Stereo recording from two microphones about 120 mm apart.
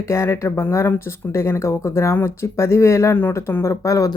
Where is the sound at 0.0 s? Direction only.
25° left (ahead or behind).